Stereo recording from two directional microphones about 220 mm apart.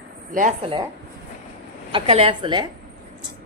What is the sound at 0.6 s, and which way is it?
Speech, 25° right (ahead or behind).